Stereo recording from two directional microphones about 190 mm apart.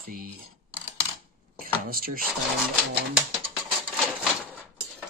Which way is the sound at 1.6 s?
50° right (ahead or behind).